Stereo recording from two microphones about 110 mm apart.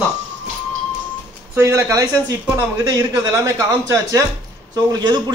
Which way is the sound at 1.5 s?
25° right (ahead or behind).